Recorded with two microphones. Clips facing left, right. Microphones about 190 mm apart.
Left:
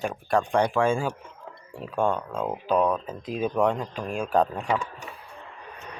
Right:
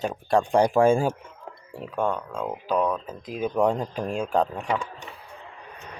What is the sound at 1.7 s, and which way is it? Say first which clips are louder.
Speech: right 1 dB; centre (ahead or behind).